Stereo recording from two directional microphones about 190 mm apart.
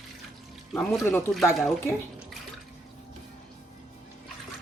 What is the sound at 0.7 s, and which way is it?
Speech, centre (ahead or behind).